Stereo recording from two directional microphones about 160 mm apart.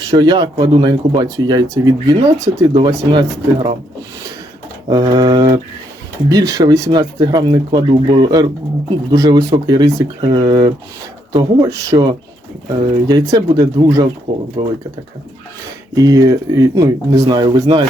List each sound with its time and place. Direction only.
0.1 s speech: 25° right (ahead or behind)
4.9 s speech: 25° right (ahead or behind)
16.0 s speech: 20° right (ahead or behind)